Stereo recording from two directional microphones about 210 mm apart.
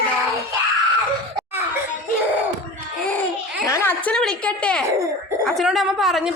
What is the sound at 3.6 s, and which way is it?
A woman's voice, 10° left (ahead or behind).